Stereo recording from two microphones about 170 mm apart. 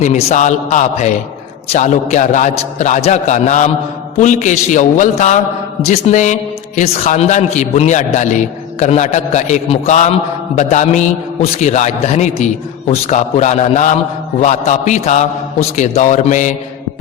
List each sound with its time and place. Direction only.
0.0 s a man's voice: 45° left (ahead or behind)